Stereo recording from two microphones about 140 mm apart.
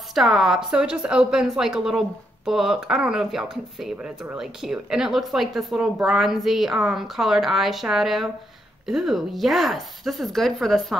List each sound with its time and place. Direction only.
0.1 s a woman's voice: centre (ahead or behind)